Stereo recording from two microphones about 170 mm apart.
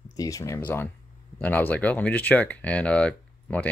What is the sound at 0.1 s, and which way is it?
Speech, 20° left (ahead or behind).